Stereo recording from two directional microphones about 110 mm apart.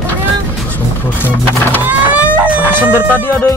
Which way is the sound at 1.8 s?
15° right (ahead or behind).